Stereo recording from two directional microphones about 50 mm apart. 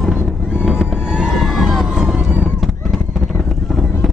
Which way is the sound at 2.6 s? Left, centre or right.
Centre.